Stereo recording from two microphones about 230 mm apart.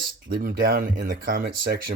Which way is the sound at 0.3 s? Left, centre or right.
Right.